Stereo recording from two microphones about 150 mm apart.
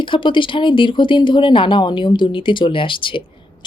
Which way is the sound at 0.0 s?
35° left (ahead or behind).